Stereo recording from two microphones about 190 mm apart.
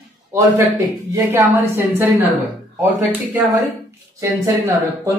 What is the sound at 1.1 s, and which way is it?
Speech, 15° right (ahead or behind).